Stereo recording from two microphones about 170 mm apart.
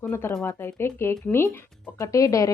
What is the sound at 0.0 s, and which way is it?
Speech, 15° left (ahead or behind).